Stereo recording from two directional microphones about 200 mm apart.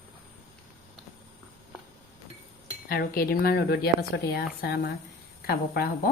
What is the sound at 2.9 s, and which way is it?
A woman's voice, 45° left (ahead or behind).